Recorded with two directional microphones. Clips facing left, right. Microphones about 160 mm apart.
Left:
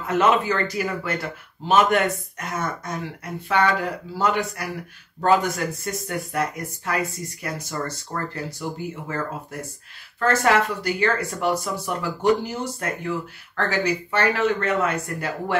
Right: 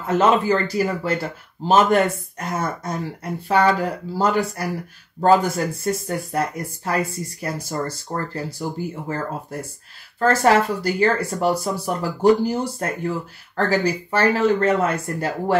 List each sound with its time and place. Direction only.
0.0 s speech: 30° right (ahead or behind)